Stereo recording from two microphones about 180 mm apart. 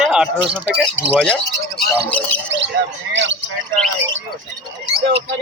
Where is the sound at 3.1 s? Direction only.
90° right.